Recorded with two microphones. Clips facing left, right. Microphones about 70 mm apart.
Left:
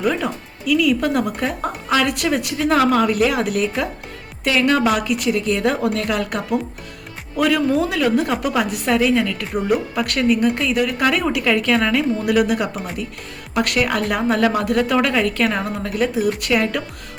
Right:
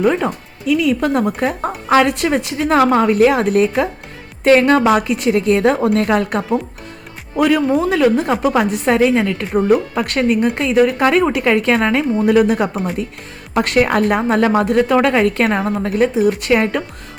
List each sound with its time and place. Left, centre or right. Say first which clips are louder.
0.0 s a woman's voice: right 5 dB; right
7.3 s a woman's voice: right 3 dB; right